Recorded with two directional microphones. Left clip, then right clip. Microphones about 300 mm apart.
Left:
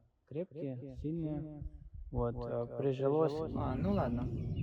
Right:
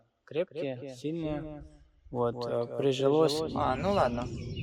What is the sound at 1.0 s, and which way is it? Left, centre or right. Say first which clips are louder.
Speech: right 6 dB; centre.